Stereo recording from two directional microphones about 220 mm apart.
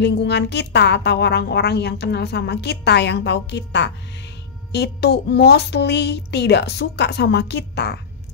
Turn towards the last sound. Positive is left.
turn(degrees=50)  # may be behind; listen again after turning